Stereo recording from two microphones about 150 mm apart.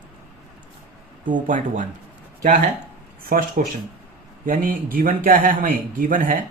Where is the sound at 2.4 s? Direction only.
70° right (ahead or behind).